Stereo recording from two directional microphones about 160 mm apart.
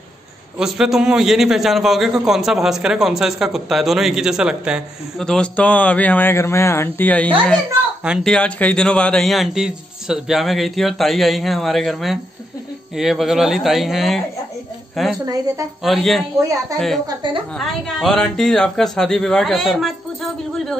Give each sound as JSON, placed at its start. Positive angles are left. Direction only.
{"t": 0.6, "sound": "a man's voice", "side_deg": 0}
{"t": 7.4, "sound": "a man's voice", "side_deg": -5}
{"t": 15.2, "sound": "a woman's voice", "side_deg": -20}
{"t": 15.8, "sound": "a man's voice", "side_deg": 0}